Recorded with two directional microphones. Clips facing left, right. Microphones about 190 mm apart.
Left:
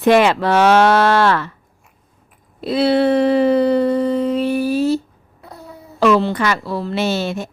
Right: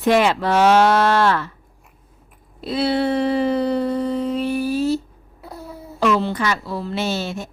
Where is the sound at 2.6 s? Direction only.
70° left (ahead or behind).